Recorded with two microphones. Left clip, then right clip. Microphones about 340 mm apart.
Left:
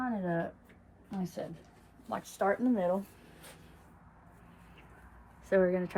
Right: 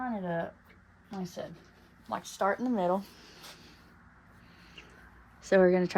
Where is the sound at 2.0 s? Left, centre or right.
Centre.